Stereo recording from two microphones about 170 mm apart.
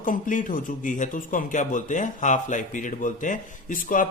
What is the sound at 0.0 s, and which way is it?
Speech, 50° left (ahead or behind).